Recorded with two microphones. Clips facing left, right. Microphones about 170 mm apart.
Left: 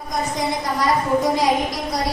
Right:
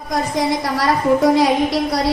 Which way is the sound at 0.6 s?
70° right (ahead or behind).